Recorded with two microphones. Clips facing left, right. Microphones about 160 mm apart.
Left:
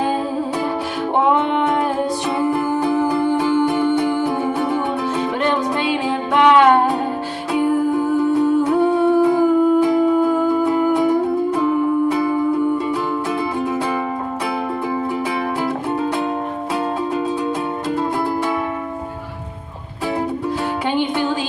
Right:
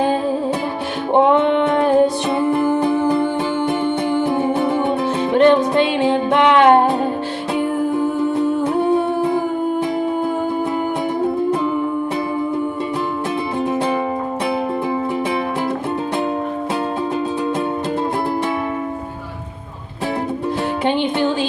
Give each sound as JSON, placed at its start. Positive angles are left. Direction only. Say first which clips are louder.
{"t": 1.1, "sound": "music", "louder": "right 4 dB", "side_deg": -25}
{"t": 8.0, "sound": "humming", "louder": "left 2 dB", "side_deg": -25}
{"t": 9.8, "sound": "music", "louder": "left 5 dB", "side_deg": -25}
{"t": 20.8, "sound": "music", "louder": "right 2 dB", "side_deg": -25}